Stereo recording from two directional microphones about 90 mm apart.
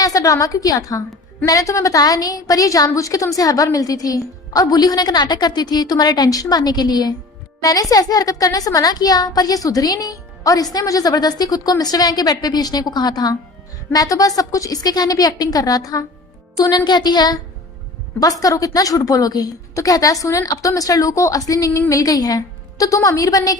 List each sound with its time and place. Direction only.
0.0 s a woman's voice: 40° left (ahead or behind)